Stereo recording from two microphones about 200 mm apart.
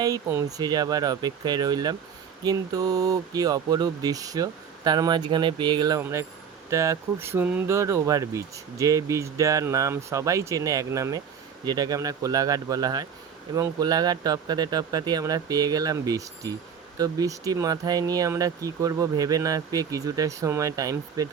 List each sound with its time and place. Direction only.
0.0 s speech: 15° right (ahead or behind)